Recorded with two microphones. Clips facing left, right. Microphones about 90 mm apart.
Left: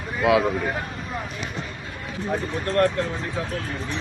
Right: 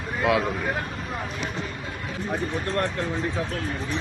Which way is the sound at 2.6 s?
20° right (ahead or behind).